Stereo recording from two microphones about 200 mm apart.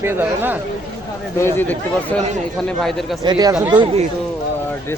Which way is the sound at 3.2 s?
20° right (ahead or behind).